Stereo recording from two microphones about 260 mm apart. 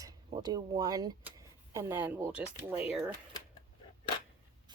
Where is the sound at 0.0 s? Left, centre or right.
Centre.